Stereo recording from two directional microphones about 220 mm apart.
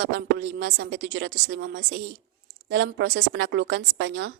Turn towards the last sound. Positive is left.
turn(degrees=-55)  # may be behind; listen again after turning